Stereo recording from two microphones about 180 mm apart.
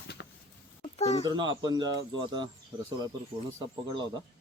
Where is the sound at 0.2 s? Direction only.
80° left.